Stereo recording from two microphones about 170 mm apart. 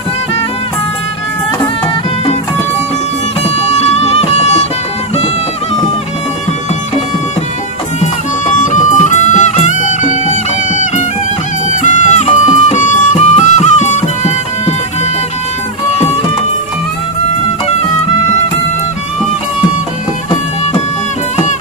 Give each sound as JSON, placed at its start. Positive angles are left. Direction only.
{"t": 3.4, "sound": "music", "side_deg": 35}
{"t": 8.5, "sound": "music", "side_deg": 45}
{"t": 11.8, "sound": "music", "side_deg": 45}